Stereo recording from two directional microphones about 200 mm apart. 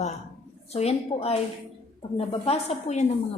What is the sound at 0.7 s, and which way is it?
A woman's voice, 30° left (ahead or behind).